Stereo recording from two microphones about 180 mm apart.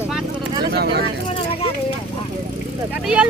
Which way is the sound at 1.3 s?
30° left (ahead or behind).